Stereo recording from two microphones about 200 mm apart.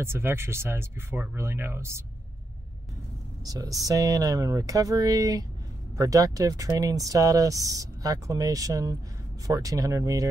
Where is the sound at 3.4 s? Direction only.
20° right (ahead or behind).